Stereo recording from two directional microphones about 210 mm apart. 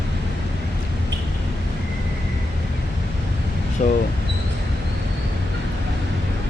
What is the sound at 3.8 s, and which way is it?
Speech, 35° left (ahead or behind).